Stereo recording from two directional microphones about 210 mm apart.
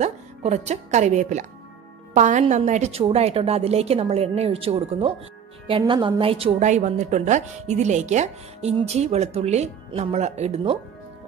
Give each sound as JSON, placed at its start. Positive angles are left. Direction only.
{"t": 0.0, "sound": "a woman's voice", "side_deg": -30}